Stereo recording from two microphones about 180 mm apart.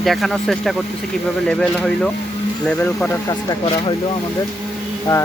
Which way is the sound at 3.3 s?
25° left (ahead or behind).